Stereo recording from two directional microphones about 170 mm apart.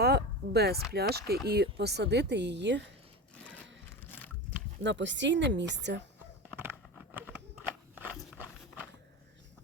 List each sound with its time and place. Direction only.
0.0 s a sound: 70° right (ahead or behind)
0.9 s a woman's voice: 70° right (ahead or behind); by 2.9 s 90° right
4.8 s a woman's voice: 90° right